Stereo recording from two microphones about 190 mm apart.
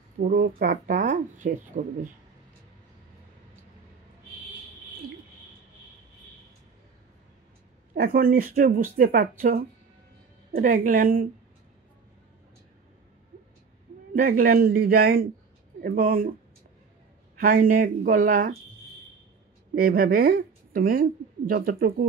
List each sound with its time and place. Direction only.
0.2 s speech: 55° right (ahead or behind)
0.6 s speech: 45° right (ahead or behind)
7.9 s speech: 50° right (ahead or behind)
14.1 s speech: 45° right (ahead or behind)
17.4 s speech: 45° right (ahead or behind)
19.7 s speech: 50° right (ahead or behind)